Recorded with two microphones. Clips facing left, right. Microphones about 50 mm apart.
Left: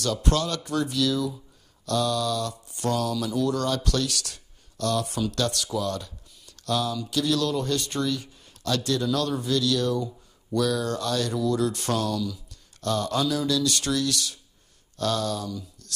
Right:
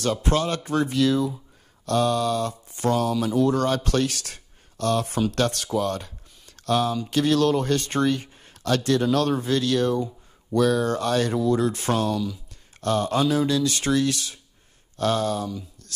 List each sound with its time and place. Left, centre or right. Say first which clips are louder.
0.0 s speech: right 3 dB; right